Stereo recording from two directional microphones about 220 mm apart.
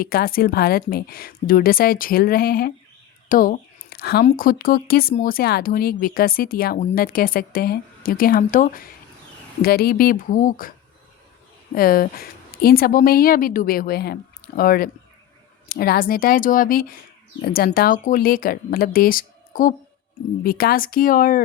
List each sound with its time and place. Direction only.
0.0 s a woman's voice: 40° left (ahead or behind)